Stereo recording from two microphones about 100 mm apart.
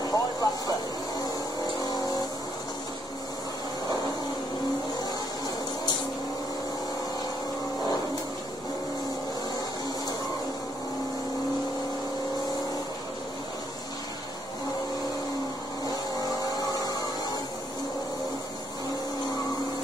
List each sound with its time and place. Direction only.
0.0 s a sound: 40° left (ahead or behind)
1.9 s vehicle: 40° left (ahead or behind)
15.8 s vehicle: 40° left (ahead or behind)